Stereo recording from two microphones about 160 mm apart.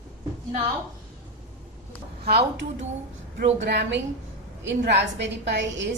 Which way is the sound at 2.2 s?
85° right.